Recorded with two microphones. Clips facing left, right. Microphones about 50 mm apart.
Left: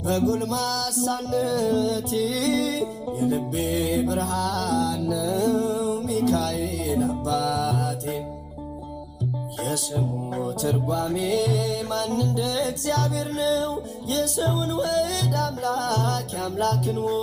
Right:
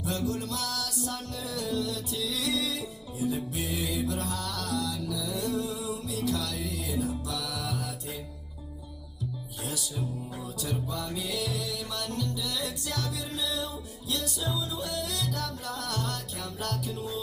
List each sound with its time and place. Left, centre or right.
0.0 s music: left
9.6 s music: left